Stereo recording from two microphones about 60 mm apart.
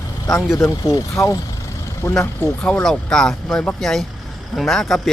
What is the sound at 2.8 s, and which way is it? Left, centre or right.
A man's voice, centre.